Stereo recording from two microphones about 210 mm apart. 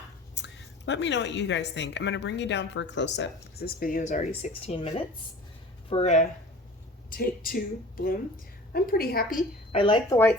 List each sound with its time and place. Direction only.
0.3 s a woman's voice: 55° left (ahead or behind); by 6.2 s 30° left (ahead or behind)
7.1 s speech: 45° left (ahead or behind)
9.7 s speech: 20° left (ahead or behind)